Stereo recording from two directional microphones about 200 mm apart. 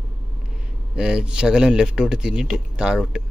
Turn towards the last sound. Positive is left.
turn(degrees=-5)  # may be behind; listen again after turning